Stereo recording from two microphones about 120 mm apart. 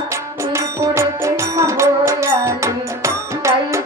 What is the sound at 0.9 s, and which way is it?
Music, 25° right (ahead or behind).